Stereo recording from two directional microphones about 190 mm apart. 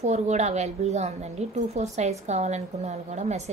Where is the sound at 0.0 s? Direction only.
35° right (ahead or behind).